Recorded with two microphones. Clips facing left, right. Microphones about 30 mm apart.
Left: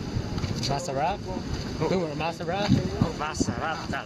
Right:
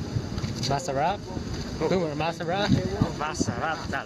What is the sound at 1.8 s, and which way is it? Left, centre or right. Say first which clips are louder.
Speech: right 1 dB; centre.